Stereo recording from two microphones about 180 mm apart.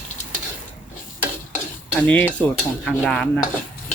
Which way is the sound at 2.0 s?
10° left (ahead or behind).